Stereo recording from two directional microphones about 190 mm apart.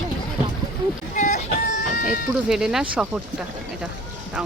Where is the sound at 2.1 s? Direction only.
5° right (ahead or behind).